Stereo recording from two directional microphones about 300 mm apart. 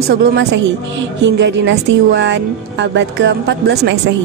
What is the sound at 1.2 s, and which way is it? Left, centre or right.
Speech, right.